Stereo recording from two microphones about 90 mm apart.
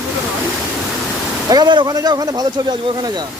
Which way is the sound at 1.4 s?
50° right (ahead or behind).